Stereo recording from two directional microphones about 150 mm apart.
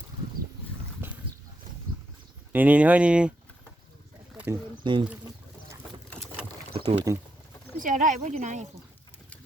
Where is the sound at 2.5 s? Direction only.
10° right (ahead or behind).